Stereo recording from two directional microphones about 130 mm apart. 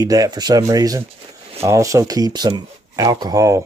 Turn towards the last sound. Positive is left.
turn(degrees=-25)  # may be behind; listen again after turning